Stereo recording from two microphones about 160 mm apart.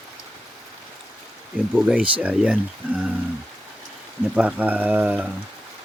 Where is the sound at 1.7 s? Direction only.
10° right (ahead or behind).